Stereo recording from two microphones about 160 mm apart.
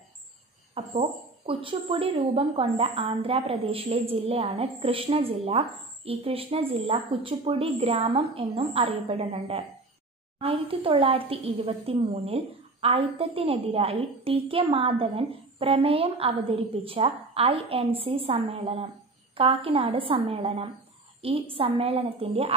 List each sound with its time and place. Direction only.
0.7 s a woman's voice: 35° right (ahead or behind)